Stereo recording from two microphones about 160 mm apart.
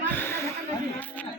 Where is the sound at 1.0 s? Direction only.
10° left (ahead or behind).